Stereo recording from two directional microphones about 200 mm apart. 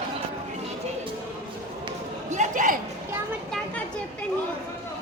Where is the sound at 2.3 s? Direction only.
40° right (ahead or behind).